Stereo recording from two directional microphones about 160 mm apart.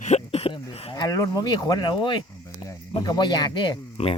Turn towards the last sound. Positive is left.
turn(degrees=30)  # may be behind; listen again after turning